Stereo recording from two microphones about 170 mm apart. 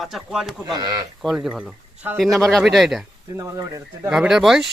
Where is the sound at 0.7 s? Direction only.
25° right (ahead or behind).